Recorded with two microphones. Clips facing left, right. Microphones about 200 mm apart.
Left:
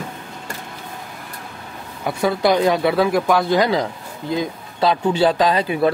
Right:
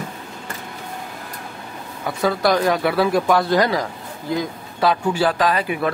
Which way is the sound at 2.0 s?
15° left (ahead or behind).